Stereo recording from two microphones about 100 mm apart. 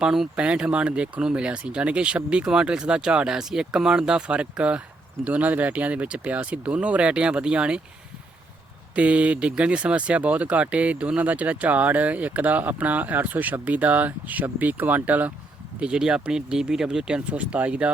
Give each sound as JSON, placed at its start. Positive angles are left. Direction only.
{"t": 0.0, "sound": "speech", "side_deg": -5}
{"t": 9.0, "sound": "speech", "side_deg": -10}